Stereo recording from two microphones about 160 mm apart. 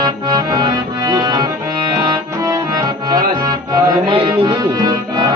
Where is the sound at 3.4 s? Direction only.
25° right (ahead or behind).